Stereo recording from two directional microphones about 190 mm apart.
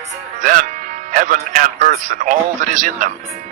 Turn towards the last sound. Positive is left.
turn(degrees=-45)  # may be behind; listen again after turning